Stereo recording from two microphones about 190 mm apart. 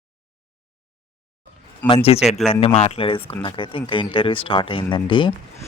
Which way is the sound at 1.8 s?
10° left (ahead or behind).